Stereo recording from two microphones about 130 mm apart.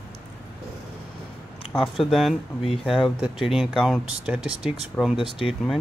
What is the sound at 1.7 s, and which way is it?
Speech, centre (ahead or behind).